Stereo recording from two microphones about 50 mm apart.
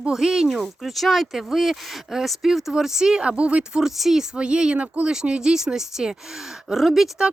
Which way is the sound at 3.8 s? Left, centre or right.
Centre.